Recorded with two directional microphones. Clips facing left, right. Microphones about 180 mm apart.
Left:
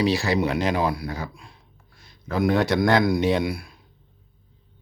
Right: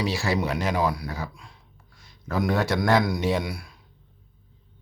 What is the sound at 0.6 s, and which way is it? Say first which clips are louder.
Speech: left 2 dB; 10° left (ahead or behind).